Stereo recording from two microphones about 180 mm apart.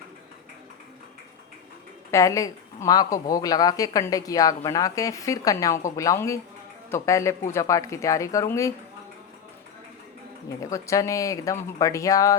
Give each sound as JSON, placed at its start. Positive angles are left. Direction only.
{"t": 2.0, "sound": "a woman's voice", "side_deg": 15}
{"t": 10.6, "sound": "speech", "side_deg": 20}